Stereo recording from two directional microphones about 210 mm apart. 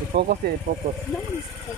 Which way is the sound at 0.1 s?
50° right (ahead or behind).